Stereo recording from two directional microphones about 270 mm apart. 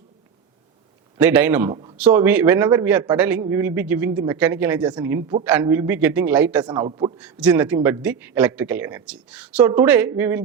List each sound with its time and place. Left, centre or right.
1.2 s a man's voice: centre
1.7 s speech: centre
2.0 s a man's voice: centre
6.7 s a man's voice: centre
7.2 s a man's voice: centre